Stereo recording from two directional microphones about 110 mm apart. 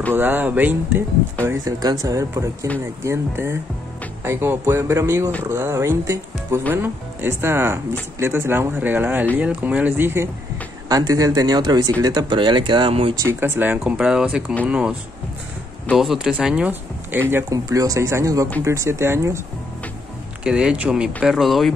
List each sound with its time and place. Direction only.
0.1 s speech: 15° right (ahead or behind)
1.4 s speech: 30° right (ahead or behind)
10.9 s speech: 35° right (ahead or behind); by 13.1 s 55° right (ahead or behind)
13.3 s speech: 20° right (ahead or behind)
13.9 s speech: 5° right (ahead or behind)
16.0 s speech: 5° right (ahead or behind)
17.5 s speech: 30° right (ahead or behind)
20.4 s speech: 10° right (ahead or behind)